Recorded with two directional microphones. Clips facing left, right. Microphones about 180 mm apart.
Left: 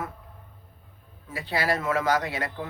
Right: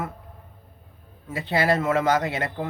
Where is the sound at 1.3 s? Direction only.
25° right (ahead or behind).